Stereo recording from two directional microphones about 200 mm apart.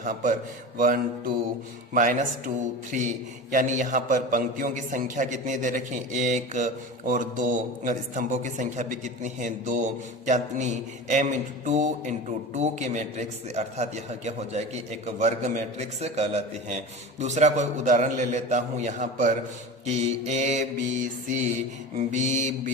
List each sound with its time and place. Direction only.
0.0 s a man's voice: 40° right (ahead or behind)
0.8 s a sound: 45° right (ahead or behind)
1.9 s a man's voice: 40° right (ahead or behind)